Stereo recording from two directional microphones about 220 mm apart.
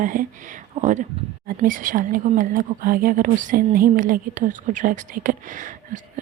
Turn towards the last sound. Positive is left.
turn(degrees=-35)  # may be behind; listen again after turning